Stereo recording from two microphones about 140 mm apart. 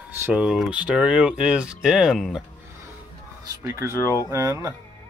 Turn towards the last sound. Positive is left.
turn(degrees=-20)  # may be behind; listen again after turning